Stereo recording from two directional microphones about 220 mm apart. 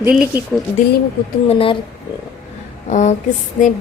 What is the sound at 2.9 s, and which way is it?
Speech, 35° left (ahead or behind).